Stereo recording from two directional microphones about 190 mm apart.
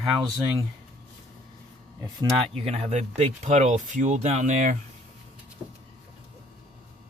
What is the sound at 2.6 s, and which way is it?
Speech, 35° right (ahead or behind).